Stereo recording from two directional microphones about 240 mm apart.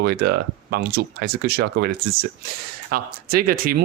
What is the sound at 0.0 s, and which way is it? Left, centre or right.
Speech, right.